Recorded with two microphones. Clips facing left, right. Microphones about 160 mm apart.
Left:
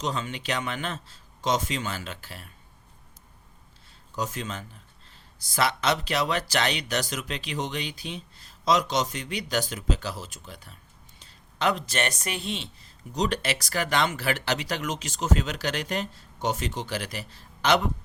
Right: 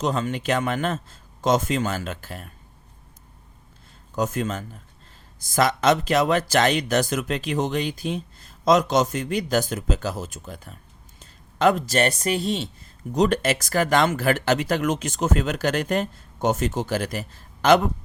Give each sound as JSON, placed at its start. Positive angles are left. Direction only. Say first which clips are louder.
{"t": 0.0, "sound": "speech", "louder": "right 6 dB", "side_deg": -50}
{"t": 4.1, "sound": "speech", "louder": "right 7 dB", "side_deg": -50}